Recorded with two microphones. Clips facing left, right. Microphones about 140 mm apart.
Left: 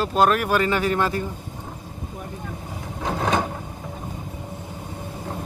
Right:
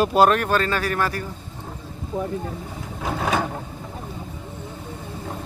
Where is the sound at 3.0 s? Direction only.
5° right (ahead or behind).